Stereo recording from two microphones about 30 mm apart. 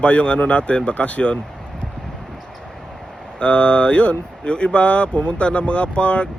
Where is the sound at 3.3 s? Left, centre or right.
Left.